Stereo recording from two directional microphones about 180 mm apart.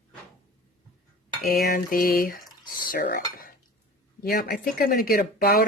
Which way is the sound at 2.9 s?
55° left (ahead or behind).